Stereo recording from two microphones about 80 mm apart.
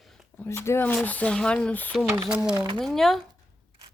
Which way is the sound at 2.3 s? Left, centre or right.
Centre.